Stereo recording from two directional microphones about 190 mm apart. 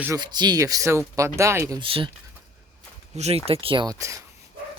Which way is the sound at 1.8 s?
30° right (ahead or behind).